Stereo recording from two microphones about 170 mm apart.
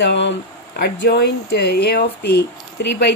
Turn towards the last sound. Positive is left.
turn(degrees=80)